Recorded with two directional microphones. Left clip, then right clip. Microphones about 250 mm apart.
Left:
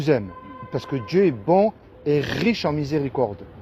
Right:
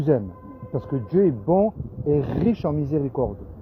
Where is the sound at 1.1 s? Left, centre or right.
Left.